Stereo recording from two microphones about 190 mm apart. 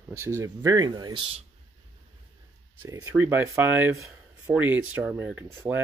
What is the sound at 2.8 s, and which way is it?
Speech, 15° right (ahead or behind).